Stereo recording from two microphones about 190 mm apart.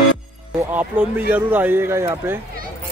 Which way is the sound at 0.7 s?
10° right (ahead or behind).